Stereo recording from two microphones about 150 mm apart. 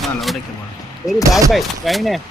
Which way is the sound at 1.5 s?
Centre (ahead or behind).